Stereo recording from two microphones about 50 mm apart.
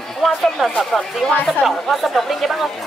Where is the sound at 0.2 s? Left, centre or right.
Centre.